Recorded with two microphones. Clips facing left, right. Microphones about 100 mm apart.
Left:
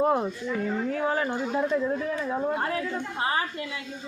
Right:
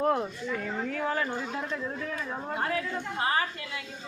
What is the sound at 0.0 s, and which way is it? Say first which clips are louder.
A woman's voice: left 3 dB; 20° left (ahead or behind).